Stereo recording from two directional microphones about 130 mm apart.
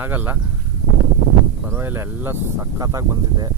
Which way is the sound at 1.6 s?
15° right (ahead or behind).